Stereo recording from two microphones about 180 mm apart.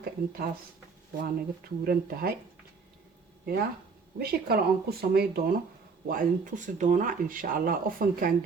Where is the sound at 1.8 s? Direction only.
60° right (ahead or behind).